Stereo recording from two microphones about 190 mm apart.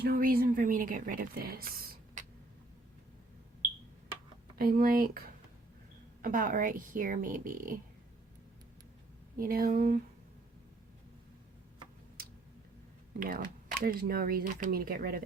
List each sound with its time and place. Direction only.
0.0 s a woman's voice: 50° right (ahead or behind)
4.5 s a woman's voice: 50° right (ahead or behind)
9.4 s a woman's voice: 50° right (ahead or behind)
13.1 s a woman's voice: 50° right (ahead or behind)